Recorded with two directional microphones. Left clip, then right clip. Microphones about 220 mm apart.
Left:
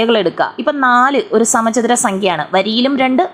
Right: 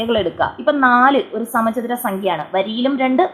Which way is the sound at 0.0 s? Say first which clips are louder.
Left 5 dB; 15° left (ahead or behind).